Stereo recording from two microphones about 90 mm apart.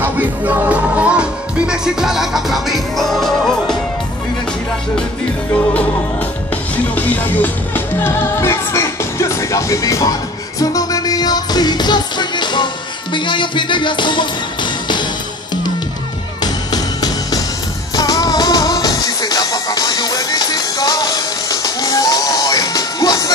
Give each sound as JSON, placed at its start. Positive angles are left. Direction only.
{"t": 0.0, "sound": "music", "side_deg": -20}
{"t": 6.5, "sound": "music", "side_deg": 20}
{"t": 16.4, "sound": "music", "side_deg": 45}